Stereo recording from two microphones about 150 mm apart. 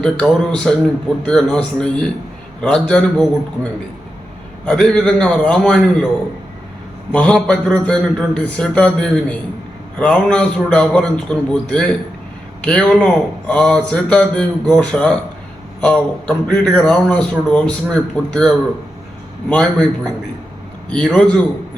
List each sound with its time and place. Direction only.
0.0 s a man's voice: 5° left (ahead or behind)
7.1 s a man's voice: 5° left (ahead or behind)
20.9 s a man's voice: 10° left (ahead or behind)